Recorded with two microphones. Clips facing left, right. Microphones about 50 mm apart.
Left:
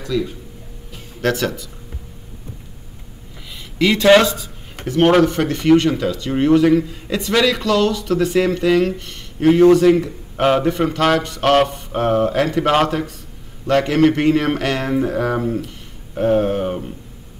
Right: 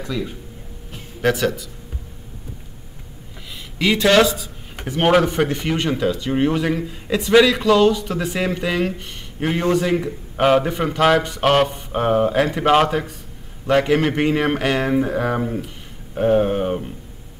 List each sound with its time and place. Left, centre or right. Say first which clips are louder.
0.0 s speech: left 4 dB; centre
1.2 s speech: right 1 dB; centre
3.7 s speech: left 3 dB; centre
4.2 s a sound: right 2 dB; centre
4.8 s speech: left 3 dB; centre